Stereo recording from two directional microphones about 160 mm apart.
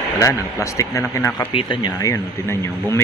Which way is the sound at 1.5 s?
30° left (ahead or behind).